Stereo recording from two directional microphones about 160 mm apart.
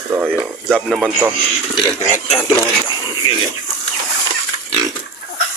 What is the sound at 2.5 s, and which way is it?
Speech, 30° left (ahead or behind).